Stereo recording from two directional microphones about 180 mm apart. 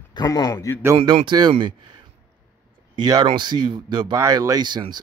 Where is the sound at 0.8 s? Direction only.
20° right (ahead or behind).